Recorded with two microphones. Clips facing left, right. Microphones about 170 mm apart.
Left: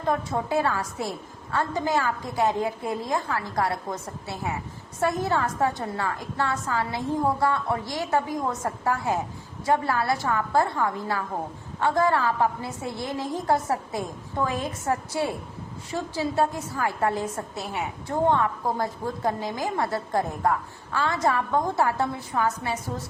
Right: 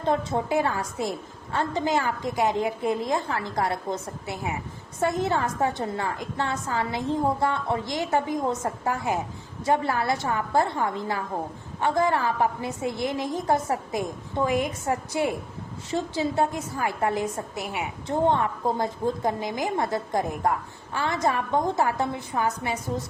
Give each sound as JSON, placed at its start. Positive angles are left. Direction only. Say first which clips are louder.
{"t": 0.0, "sound": "a woman's voice", "louder": "right 1 dB", "side_deg": -25}